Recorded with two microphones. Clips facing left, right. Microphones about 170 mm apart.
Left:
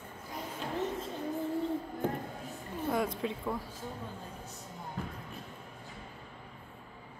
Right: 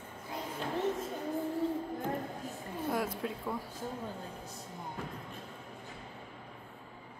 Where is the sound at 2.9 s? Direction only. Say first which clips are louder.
Left 3 dB; 5° right (ahead or behind).